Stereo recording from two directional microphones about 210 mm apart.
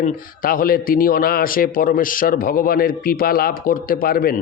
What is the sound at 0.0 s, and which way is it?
A man's voice, 45° left (ahead or behind).